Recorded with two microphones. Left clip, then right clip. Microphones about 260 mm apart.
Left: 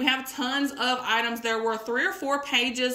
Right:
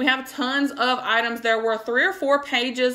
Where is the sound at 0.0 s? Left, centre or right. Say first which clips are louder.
Right 4 dB; centre.